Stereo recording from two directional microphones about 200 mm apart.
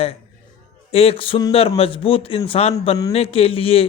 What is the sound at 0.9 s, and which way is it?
Speech, 30° left (ahead or behind).